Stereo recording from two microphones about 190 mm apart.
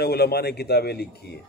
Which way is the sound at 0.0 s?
55° left (ahead or behind).